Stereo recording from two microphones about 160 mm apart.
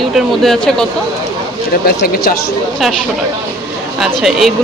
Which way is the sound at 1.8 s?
75° left (ahead or behind).